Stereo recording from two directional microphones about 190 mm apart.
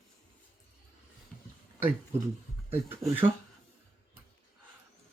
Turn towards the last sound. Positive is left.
turn(degrees=0)  # may be behind; listen again after turning